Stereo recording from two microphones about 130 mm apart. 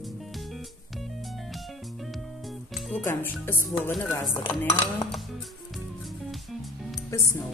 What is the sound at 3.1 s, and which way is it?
Speech, 15° left (ahead or behind).